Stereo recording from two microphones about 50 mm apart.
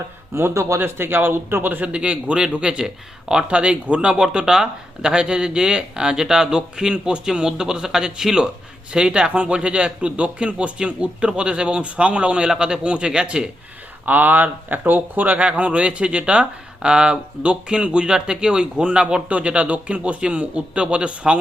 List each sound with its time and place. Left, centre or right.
0.5 s speech: right
0.8 s speech: right
1.9 s speech: right
14.0 s speech: right